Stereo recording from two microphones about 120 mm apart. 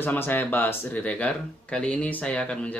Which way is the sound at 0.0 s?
15° left (ahead or behind).